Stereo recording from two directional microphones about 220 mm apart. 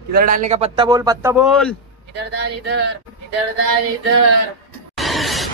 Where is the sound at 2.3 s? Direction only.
50° right (ahead or behind).